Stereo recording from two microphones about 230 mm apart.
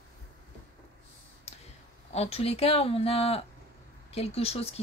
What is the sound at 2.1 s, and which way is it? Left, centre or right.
Speech, left.